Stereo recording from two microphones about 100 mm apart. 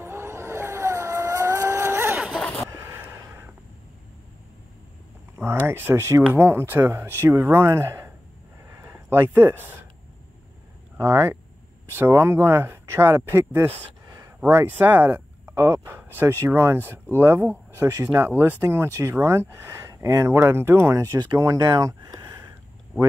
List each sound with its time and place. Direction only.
0.0 s vehicle: 25° right (ahead or behind)
2.7 s a sound: 25° right (ahead or behind)
5.4 s speech: 25° right (ahead or behind)
9.1 s speech: 25° right (ahead or behind)
11.0 s speech: 25° right (ahead or behind)
14.0 s a sound: 35° right (ahead or behind)
14.5 s speech: 20° right (ahead or behind)
15.4 s speech: 30° right (ahead or behind)
18.2 s speech: 20° right (ahead or behind)
21.0 s speech: 40° right (ahead or behind)